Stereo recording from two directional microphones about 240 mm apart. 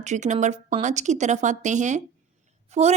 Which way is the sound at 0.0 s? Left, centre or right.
Right.